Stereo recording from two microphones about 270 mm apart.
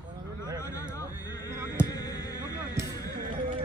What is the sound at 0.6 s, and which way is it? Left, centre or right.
Heart sounds, centre.